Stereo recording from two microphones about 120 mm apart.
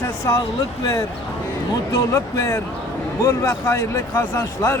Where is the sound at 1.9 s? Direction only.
25° left (ahead or behind).